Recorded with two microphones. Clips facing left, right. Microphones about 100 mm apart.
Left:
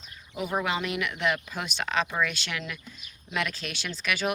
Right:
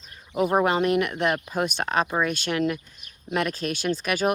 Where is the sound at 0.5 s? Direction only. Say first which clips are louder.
Right 7 dB; 45° right (ahead or behind).